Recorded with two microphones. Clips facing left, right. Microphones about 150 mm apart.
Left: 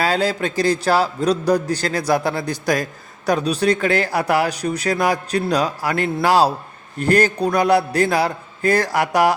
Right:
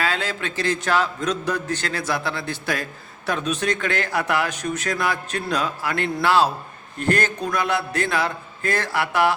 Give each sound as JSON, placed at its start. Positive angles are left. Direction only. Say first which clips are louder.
{"t": 0.0, "sound": "a man's voice", "louder": "left 6 dB", "side_deg": 40}